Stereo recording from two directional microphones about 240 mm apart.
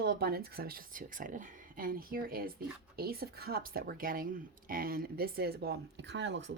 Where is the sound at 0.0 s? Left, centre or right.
Right.